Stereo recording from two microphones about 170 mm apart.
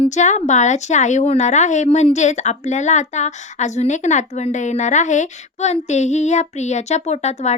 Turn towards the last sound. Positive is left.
turn(degrees=40)  # may be behind; listen again after turning